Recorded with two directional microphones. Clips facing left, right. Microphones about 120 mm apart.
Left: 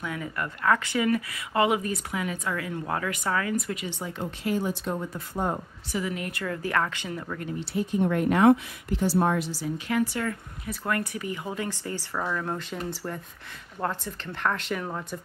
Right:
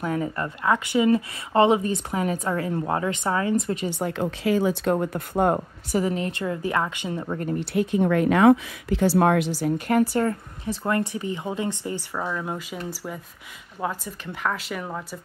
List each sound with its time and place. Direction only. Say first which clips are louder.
0.0 s speech: right 6 dB; 35° right (ahead or behind)
0.7 s speech: right 4 dB; 20° right (ahead or behind)
4.0 s speech: right 7 dB; 85° right; by 5.6 s 65° right (ahead or behind)
5.9 s a woman's voice: right 6 dB; 40° right (ahead or behind)
6.1 s speech: right 5 dB; 25° right (ahead or behind)
7.3 s a woman's voice: right 6 dB; 45° right (ahead or behind)
7.7 s speech: right 4 dB; 85° right
9.6 s speech: right 6 dB; 50° right (ahead or behind); by 15.1 s 5° right (ahead or behind)